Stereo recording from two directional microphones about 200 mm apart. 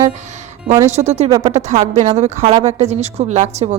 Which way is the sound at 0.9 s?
35° right (ahead or behind).